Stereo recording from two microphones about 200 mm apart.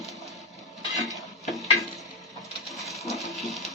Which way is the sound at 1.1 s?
Centre (ahead or behind).